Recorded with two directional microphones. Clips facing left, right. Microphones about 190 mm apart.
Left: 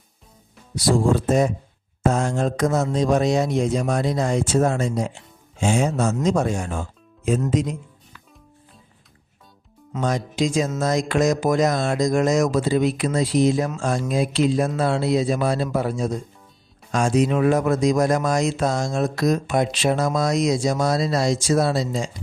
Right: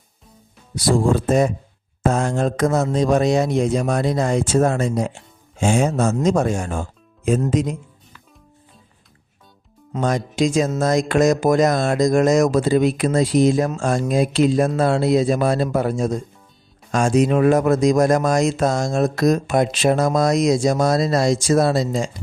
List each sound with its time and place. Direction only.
1.1 s speech: 60° right (ahead or behind)
10.0 s speech: 50° right (ahead or behind)